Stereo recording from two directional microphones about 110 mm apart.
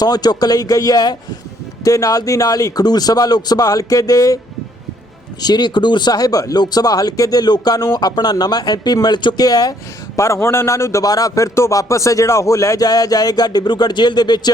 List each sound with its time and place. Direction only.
0.0 s speech: 40° left (ahead or behind)
5.4 s speech: 40° left (ahead or behind)